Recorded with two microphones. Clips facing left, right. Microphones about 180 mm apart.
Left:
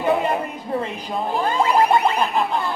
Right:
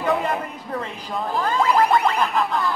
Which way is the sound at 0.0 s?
25° left (ahead or behind).